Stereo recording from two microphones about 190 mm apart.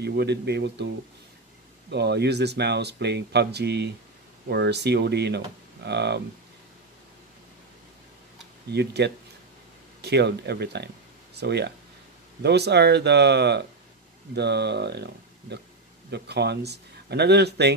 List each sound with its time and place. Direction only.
0.0 s speech: 60° right (ahead or behind)
8.7 s speech: 60° right (ahead or behind)